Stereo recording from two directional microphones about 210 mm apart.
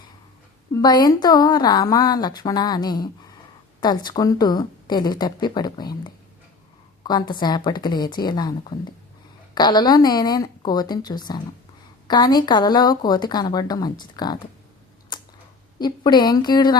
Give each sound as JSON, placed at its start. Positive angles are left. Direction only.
{"t": 0.7, "sound": "a woman's voice", "side_deg": 20}
{"t": 7.0, "sound": "a woman's voice", "side_deg": 20}
{"t": 15.1, "sound": "a sound", "side_deg": 20}
{"t": 15.8, "sound": "a woman's voice", "side_deg": 20}